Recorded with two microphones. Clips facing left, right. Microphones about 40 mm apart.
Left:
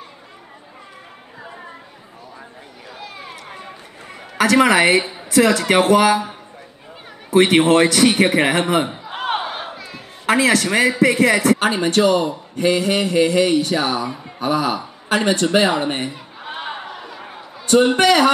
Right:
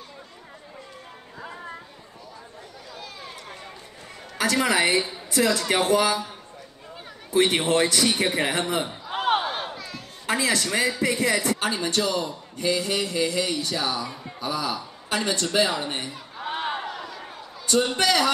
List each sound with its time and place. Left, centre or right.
2.9 s a sound: left
4.6 s a man's voice: left
7.3 s a man's voice: left
9.1 s battle cry: centre
10.2 s a man's voice: left
11.6 s a man's voice: left
16.3 s a sound: centre
17.6 s a man's voice: left